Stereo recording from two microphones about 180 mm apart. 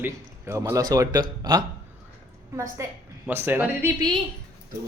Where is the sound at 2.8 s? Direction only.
15° right (ahead or behind).